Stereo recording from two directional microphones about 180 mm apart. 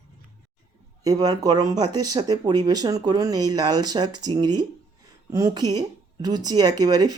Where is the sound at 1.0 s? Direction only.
20° right (ahead or behind).